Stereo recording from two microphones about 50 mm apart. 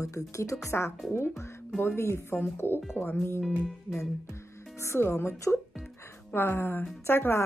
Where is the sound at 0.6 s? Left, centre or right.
Left.